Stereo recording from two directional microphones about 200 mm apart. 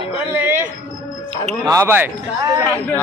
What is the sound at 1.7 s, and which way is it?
Speech, 10° right (ahead or behind).